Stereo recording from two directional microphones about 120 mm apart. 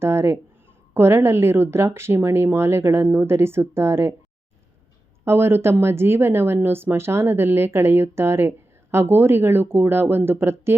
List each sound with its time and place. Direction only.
0.0 s a woman's voice: 20° right (ahead or behind)
5.2 s a woman's voice: 20° right (ahead or behind)